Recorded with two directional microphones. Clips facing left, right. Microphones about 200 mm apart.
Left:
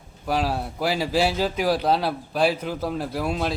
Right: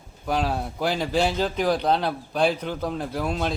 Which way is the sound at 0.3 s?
5° left (ahead or behind).